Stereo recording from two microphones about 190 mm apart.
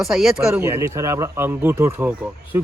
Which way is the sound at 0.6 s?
15° right (ahead or behind).